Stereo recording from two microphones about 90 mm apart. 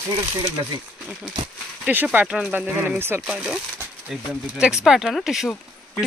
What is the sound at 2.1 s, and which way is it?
Speech, 10° right (ahead or behind).